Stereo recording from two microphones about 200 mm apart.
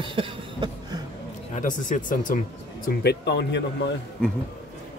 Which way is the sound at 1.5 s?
40° left (ahead or behind).